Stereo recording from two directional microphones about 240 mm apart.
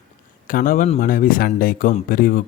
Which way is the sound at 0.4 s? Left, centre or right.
Left.